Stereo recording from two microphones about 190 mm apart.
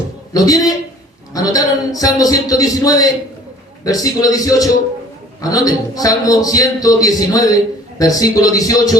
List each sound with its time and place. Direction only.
0.3 s a man's voice: 20° left (ahead or behind)